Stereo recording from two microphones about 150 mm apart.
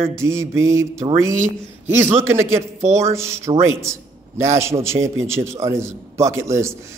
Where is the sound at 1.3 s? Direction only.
55° right (ahead or behind).